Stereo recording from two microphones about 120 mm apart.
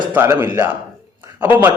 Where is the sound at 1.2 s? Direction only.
15° right (ahead or behind).